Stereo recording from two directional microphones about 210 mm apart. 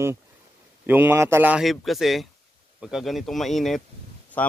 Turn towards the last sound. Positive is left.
turn(degrees=5)  # may be behind; listen again after turning